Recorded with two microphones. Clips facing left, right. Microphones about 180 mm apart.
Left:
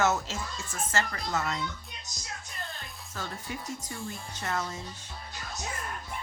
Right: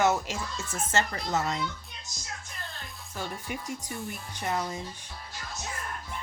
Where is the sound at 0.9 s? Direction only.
25° right (ahead or behind).